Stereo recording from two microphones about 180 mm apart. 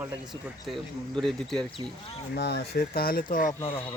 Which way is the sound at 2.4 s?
65° left (ahead or behind).